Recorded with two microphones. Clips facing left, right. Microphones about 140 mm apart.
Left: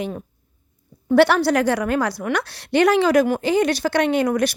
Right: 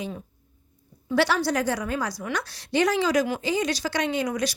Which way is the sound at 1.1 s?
60° left (ahead or behind).